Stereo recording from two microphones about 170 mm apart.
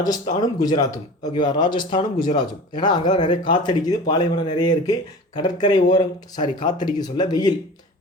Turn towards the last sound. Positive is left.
turn(degrees=25)  # may be behind; listen again after turning